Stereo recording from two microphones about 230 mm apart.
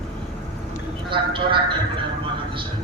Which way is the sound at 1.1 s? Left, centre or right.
Right.